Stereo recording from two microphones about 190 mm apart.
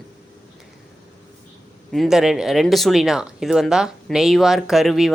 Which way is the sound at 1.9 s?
Centre (ahead or behind).